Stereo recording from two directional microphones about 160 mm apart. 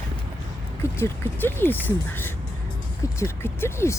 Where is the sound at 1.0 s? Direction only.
15° left (ahead or behind).